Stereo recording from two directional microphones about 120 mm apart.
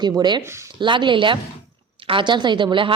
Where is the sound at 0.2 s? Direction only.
40° right (ahead or behind).